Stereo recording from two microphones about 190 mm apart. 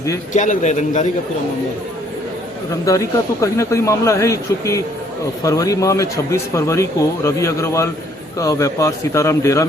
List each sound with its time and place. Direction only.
0.3 s a man's voice: 40° left (ahead or behind)
2.8 s speech: 15° left (ahead or behind)